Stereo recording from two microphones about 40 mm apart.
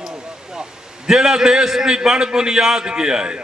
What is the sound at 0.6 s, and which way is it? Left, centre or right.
A man's voice, centre.